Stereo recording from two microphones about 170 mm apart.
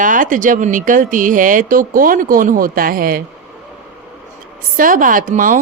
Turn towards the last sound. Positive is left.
turn(degrees=-50)  # may be behind; listen again after turning